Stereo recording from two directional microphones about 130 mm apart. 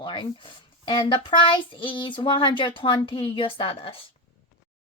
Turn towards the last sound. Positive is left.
turn(degrees=45)  # may be behind; listen again after turning